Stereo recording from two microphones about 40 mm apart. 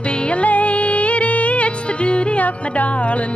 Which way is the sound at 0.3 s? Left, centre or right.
Left.